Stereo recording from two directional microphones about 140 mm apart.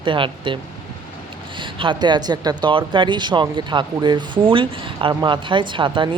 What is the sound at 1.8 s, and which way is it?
Speech, 35° right (ahead or behind).